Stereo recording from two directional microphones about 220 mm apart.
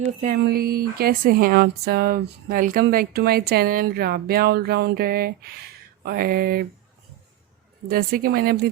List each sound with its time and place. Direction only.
0.2 s speech: 40° right (ahead or behind)
7.9 s speech: 40° right (ahead or behind)